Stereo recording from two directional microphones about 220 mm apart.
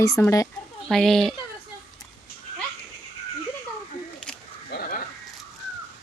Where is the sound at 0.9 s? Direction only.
Centre (ahead or behind).